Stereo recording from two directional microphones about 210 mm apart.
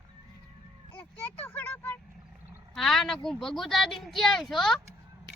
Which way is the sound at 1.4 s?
10° left (ahead or behind).